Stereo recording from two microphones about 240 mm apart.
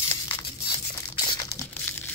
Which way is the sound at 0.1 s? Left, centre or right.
Centre.